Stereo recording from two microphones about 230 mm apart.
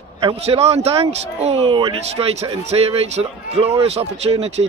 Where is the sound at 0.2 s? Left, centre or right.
Right.